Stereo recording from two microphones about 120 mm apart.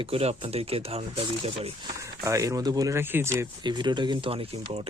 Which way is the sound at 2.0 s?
25° right (ahead or behind).